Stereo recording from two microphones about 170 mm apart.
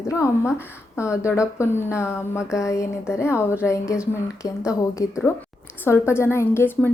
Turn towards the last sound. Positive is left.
turn(degrees=15)  # may be behind; listen again after turning